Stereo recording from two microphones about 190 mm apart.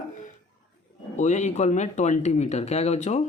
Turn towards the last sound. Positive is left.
turn(degrees=35)  # may be behind; listen again after turning